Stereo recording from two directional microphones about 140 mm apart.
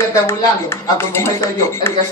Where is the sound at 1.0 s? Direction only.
15° left (ahead or behind).